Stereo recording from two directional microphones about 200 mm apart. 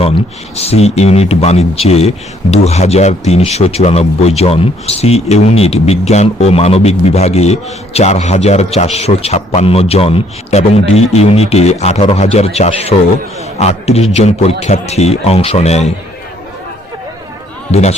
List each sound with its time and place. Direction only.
0.0 s speech: 30° left (ahead or behind)
17.7 s speech: 35° left (ahead or behind)